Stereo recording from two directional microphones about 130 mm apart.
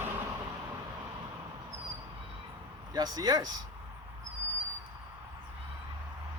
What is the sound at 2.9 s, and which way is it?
Speech, 30° right (ahead or behind).